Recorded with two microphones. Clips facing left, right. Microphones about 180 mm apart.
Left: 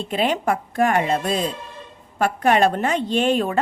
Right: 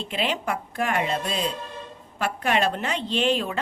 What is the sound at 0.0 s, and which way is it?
A woman's voice, 45° left (ahead or behind).